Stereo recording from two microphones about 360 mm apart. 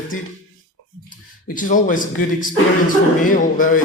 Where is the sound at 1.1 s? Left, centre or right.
Left.